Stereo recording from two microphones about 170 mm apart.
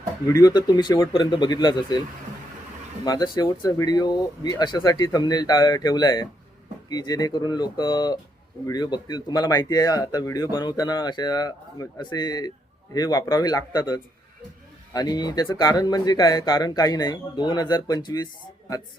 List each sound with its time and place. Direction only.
0.3 s a man's voice: 20° left (ahead or behind)
3.0 s a man's voice: 25° left (ahead or behind)